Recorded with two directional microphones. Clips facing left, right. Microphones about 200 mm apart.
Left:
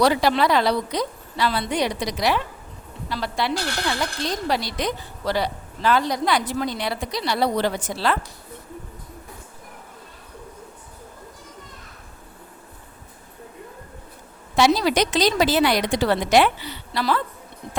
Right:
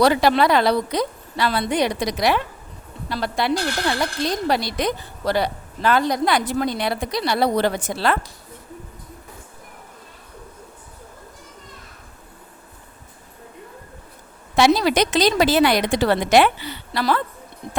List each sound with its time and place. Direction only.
0.0 s a woman's voice: 60° right (ahead or behind)
14.5 s a woman's voice: 60° right (ahead or behind)